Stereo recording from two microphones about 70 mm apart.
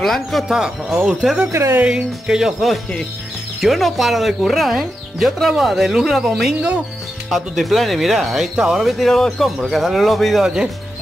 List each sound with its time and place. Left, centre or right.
0.0 s speech: centre
1.5 s speech: right
1.9 s speech: centre